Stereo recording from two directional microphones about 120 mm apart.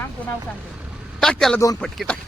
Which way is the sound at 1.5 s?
30° left (ahead or behind).